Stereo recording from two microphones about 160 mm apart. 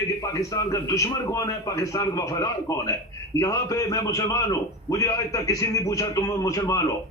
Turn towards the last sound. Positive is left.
turn(degrees=20)  # may be behind; listen again after turning